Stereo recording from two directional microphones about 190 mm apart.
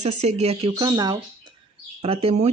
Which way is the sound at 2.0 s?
30° right (ahead or behind).